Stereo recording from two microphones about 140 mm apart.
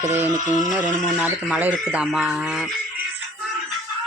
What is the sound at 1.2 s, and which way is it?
Speech, 10° right (ahead or behind).